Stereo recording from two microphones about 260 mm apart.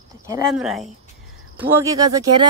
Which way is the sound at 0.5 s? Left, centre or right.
Centre.